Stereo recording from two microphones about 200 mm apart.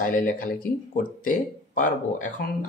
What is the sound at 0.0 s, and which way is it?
Speech, 40° left (ahead or behind).